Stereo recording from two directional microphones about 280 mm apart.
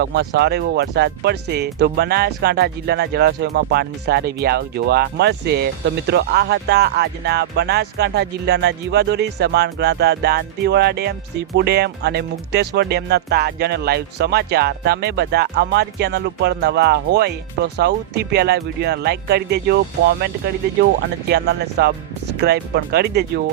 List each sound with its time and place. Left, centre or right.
0.0 s speech: right